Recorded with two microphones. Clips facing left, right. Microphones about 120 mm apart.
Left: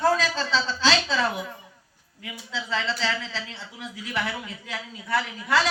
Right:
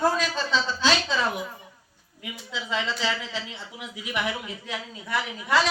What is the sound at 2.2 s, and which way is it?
A woman's voice, 15° right (ahead or behind).